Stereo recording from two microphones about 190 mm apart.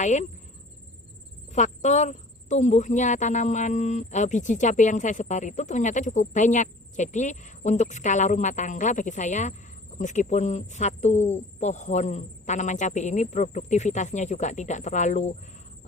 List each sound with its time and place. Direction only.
0.0 s speech: 40° left (ahead or behind)
1.5 s speech: 40° left (ahead or behind)